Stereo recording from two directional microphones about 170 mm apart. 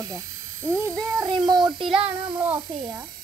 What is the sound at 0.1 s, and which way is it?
A child's voice, 15° right (ahead or behind).